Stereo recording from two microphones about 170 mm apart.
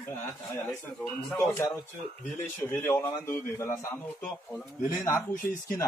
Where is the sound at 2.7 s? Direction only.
15° left (ahead or behind).